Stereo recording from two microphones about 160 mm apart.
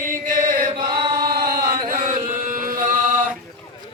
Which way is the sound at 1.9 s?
55° right (ahead or behind).